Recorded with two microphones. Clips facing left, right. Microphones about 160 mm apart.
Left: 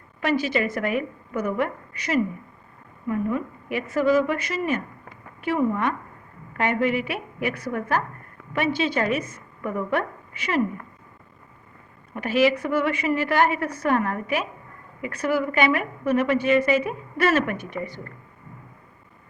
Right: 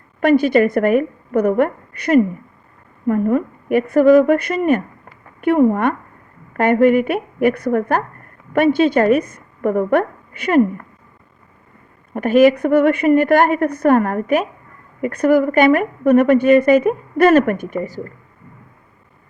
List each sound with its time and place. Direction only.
0.2 s a woman's voice: 55° right (ahead or behind)
12.1 s a woman's voice: 50° right (ahead or behind)